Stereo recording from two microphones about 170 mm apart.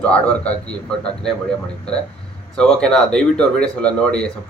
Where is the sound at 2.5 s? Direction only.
5° left (ahead or behind).